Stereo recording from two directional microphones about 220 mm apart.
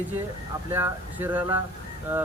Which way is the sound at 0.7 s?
10° right (ahead or behind).